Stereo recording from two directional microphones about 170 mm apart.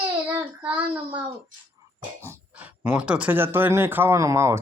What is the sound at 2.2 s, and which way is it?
Speech, 15° right (ahead or behind).